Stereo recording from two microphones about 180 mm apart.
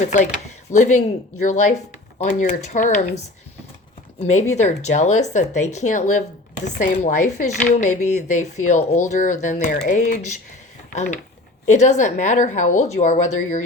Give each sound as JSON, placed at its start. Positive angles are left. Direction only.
{"t": 0.1, "sound": "speech", "side_deg": 40}
{"t": 4.2, "sound": "speech", "side_deg": 40}